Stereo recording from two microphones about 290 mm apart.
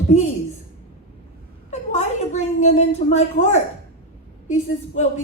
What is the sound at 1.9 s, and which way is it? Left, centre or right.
A woman's voice, left.